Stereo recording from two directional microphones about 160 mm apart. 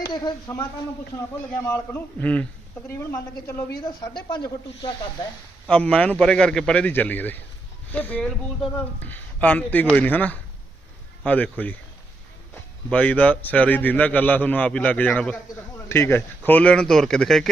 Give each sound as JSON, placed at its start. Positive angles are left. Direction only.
{"t": 0.0, "sound": "a man's voice", "side_deg": 25}
{"t": 4.3, "sound": "speech", "side_deg": 25}
{"t": 5.6, "sound": "a man's voice", "side_deg": 5}
{"t": 12.9, "sound": "a man's voice", "side_deg": 10}